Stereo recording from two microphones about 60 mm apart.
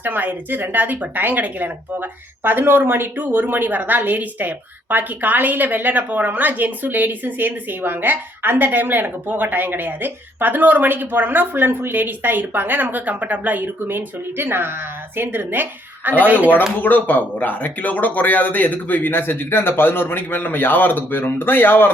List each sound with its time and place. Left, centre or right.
0.0 s speech: right
16.8 s a man's voice: left